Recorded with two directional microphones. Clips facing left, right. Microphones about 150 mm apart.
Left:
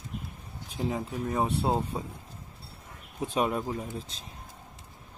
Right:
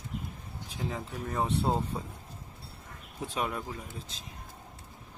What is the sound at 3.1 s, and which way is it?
Speech, 20° left (ahead or behind).